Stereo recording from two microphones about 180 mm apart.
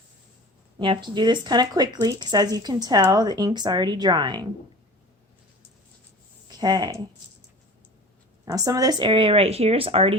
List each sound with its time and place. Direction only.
0.8 s speech: 25° right (ahead or behind)
6.6 s speech: 20° right (ahead or behind)
8.4 s speech: 20° right (ahead or behind)